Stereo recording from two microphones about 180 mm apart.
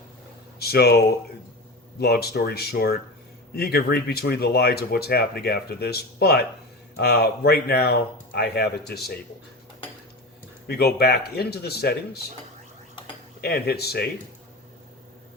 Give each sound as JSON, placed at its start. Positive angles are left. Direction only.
{"t": 0.6, "sound": "speech", "side_deg": 60}
{"t": 10.7, "sound": "speech", "side_deg": 60}
{"t": 13.4, "sound": "speech", "side_deg": 60}